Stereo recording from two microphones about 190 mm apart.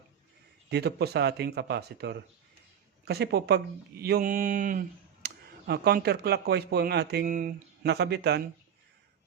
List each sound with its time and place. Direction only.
0.7 s speech: 60° right (ahead or behind)
7.9 s speech: 60° right (ahead or behind)